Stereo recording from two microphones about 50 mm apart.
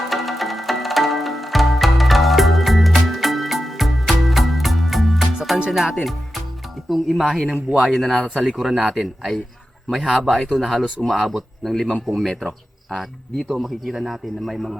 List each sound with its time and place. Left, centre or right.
0.1 s music: centre
6.0 s speech: centre
8.4 s speech: centre
13.4 s speech: centre